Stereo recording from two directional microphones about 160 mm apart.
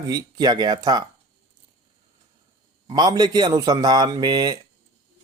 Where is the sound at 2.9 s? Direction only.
25° right (ahead or behind).